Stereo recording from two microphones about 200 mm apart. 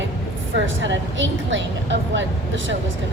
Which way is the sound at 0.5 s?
65° right (ahead or behind).